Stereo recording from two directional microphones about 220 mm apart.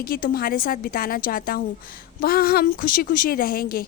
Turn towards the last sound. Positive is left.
turn(degrees=40)  # may be behind; listen again after turning